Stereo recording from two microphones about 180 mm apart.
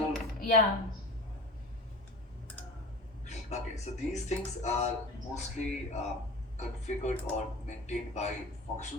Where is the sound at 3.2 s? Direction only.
40° left (ahead or behind).